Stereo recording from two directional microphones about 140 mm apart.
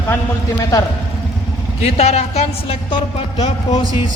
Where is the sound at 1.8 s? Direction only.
50° left (ahead or behind).